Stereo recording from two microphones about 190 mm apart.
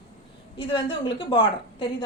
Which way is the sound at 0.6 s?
25° left (ahead or behind).